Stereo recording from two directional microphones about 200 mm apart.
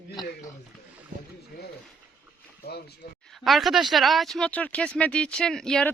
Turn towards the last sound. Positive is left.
turn(degrees=5)  # may be behind; listen again after turning